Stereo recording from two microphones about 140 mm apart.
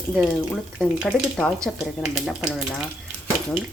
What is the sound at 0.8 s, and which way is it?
Speech, 5° left (ahead or behind).